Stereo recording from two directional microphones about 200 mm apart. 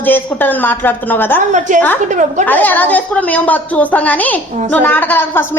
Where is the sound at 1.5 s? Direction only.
40° right (ahead or behind).